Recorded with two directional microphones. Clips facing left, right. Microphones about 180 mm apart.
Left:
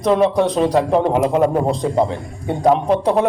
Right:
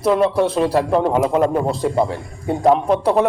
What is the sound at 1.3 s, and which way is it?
Speech, 15° left (ahead or behind).